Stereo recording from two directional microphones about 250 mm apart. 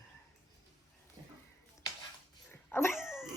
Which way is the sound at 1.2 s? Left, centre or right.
Centre.